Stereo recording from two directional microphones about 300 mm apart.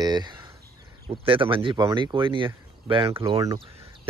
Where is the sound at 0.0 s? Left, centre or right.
Centre.